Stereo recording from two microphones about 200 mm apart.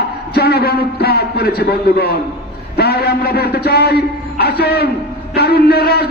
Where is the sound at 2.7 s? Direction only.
50° left (ahead or behind).